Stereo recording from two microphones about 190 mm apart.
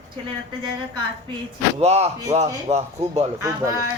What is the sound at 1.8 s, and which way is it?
A man's voice, 35° right (ahead or behind).